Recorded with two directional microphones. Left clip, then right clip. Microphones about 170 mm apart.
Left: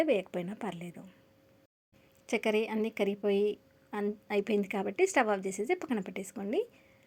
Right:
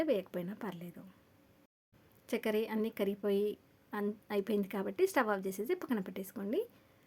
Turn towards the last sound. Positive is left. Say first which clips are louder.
# left 3 dB
turn(degrees=0)  # may be behind; listen again after turning